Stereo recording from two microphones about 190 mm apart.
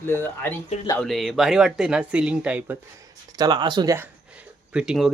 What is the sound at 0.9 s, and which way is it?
Speech, centre (ahead or behind).